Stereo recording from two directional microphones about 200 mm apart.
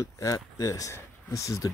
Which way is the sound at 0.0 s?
15° left (ahead or behind).